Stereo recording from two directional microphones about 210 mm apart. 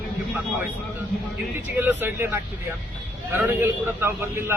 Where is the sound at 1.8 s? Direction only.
10° right (ahead or behind).